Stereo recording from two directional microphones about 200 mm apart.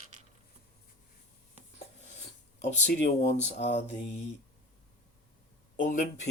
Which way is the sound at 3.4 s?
35° left (ahead or behind).